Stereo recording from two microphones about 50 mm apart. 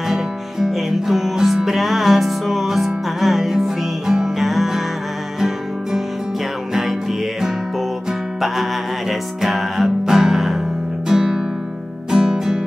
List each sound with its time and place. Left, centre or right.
0.1 s music: centre
9.4 s music: centre
11.1 s guitar: centre
12.1 s music: centre